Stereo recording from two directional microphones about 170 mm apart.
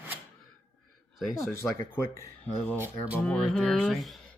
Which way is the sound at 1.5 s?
15° left (ahead or behind).